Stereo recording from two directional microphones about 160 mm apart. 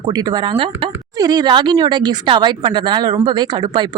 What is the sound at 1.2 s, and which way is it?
Speech, 25° right (ahead or behind).